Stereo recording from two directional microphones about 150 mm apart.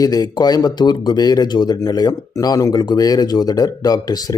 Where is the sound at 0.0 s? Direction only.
25° left (ahead or behind).